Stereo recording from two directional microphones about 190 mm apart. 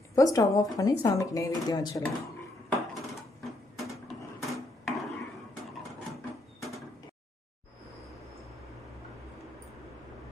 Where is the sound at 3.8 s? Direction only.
Centre (ahead or behind).